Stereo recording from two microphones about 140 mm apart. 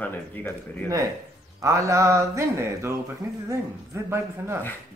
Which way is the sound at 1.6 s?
20° right (ahead or behind).